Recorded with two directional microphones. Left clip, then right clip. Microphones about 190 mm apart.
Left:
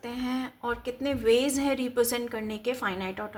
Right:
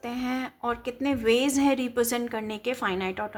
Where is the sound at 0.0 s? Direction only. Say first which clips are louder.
Right 2 dB; 30° right (ahead or behind).